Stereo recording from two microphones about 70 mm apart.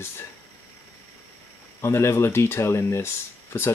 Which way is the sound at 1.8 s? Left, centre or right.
Left.